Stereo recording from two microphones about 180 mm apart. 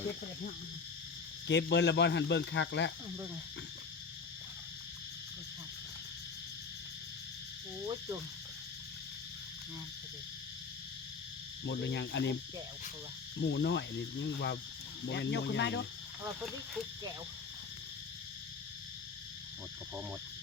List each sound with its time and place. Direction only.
1.5 s speech: 75° left (ahead or behind)
7.9 s cricket: 15° right (ahead or behind)
11.6 s speech: 75° left (ahead or behind)
13.4 s speech: 70° left (ahead or behind)